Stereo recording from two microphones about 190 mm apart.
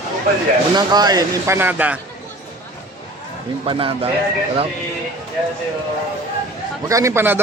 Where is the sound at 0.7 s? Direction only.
20° right (ahead or behind).